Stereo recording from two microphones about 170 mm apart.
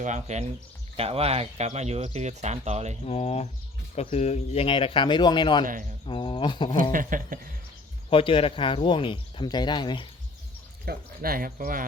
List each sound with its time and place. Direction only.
0.0 s speech: 45° right (ahead or behind)
3.1 s speech: 35° left (ahead or behind)
6.9 s speech: 50° right (ahead or behind)
8.1 s speech: 30° left (ahead or behind)
10.8 s speech: 60° right (ahead or behind)